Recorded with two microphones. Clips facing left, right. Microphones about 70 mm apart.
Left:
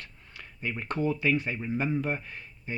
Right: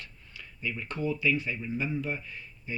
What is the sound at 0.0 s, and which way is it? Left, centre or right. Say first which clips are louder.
Speech: left 1 dB; left.